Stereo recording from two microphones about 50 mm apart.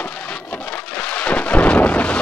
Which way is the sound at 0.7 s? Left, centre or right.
Left.